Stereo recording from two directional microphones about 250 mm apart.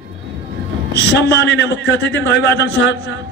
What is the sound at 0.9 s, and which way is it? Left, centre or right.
A man's voice, left.